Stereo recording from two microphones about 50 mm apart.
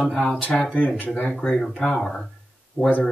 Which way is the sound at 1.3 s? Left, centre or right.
Centre.